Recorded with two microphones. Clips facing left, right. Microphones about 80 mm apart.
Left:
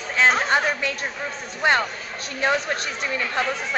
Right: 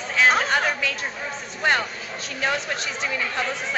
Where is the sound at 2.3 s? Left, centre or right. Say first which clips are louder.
Left 3 dB; left.